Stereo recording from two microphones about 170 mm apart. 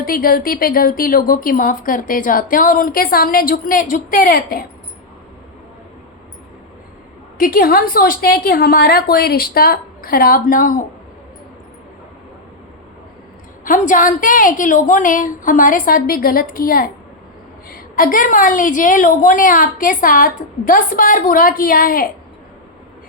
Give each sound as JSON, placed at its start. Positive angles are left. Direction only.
{"t": 0.0, "sound": "a woman's voice", "side_deg": 55}
{"t": 7.3, "sound": "a woman's voice", "side_deg": 60}
{"t": 13.7, "sound": "a woman's voice", "side_deg": 50}